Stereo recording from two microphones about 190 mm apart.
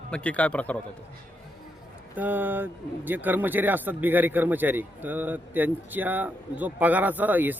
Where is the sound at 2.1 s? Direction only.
10° right (ahead or behind).